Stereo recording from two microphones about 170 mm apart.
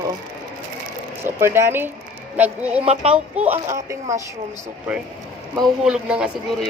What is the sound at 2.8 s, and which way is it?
Speech, 35° right (ahead or behind).